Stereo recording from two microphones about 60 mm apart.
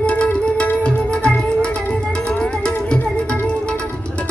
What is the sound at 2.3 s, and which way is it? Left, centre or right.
Tabla, centre.